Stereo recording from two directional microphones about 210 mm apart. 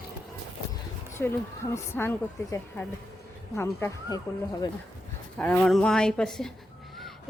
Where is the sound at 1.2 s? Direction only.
10° left (ahead or behind).